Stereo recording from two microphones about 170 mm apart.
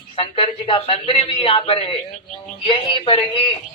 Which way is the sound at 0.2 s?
30° left (ahead or behind).